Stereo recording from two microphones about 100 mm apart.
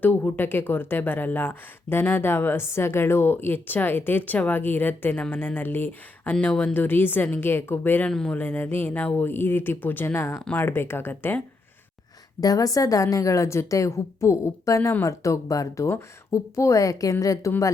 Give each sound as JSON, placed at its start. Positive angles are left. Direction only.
{"t": 0.0, "sound": "speech", "side_deg": 20}
{"t": 8.1, "sound": "speech", "side_deg": 5}
{"t": 8.4, "sound": "speech", "side_deg": 20}
{"t": 12.4, "sound": "a woman's voice", "side_deg": 35}